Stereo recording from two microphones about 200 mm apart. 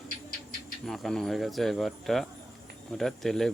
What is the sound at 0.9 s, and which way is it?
Speech, centre (ahead or behind).